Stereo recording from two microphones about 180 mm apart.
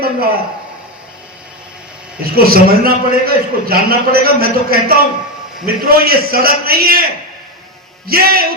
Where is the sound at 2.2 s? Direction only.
55° right (ahead or behind).